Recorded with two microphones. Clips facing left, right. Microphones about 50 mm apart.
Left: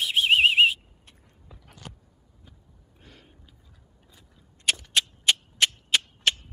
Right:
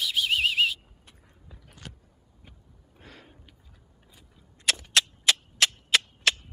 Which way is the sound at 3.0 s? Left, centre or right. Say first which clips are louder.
Right 4 dB; right.